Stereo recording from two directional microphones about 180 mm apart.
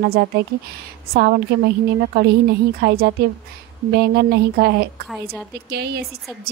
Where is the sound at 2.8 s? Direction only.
60° right (ahead or behind).